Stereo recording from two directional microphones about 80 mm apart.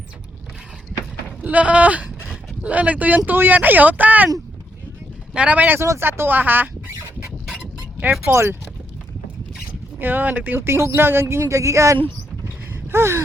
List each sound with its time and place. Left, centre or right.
1.4 s a sound: centre
2.6 s speech: centre
5.3 s speech: centre
5.8 s speech: right
7.4 s a sound: centre
8.3 s speech: right
10.0 s speech: right